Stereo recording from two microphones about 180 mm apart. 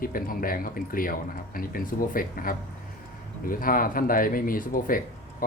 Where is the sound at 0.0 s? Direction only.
50° left (ahead or behind).